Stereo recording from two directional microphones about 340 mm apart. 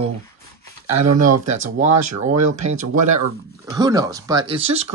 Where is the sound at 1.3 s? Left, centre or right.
Right.